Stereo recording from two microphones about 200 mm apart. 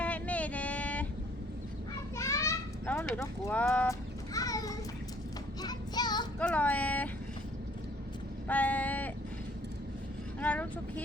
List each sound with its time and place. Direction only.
0.0 s vehicle: 5° left (ahead or behind)
2.1 s a sound: 15° left (ahead or behind)
4.4 s children playing: 15° left (ahead or behind)
5.6 s child singing: 20° left (ahead or behind)
6.4 s a sound: 5° left (ahead or behind)
8.4 s vehicle: 10° left (ahead or behind)
10.4 s speech: 5° left (ahead or behind)